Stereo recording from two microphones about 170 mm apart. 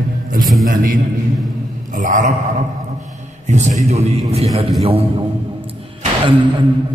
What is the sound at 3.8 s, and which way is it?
A man's voice, 40° right (ahead or behind).